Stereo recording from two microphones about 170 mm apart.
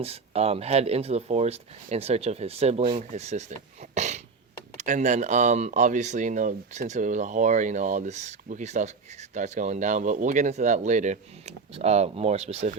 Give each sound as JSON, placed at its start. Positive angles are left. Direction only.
{"t": 0.0, "sound": "speech", "side_deg": -35}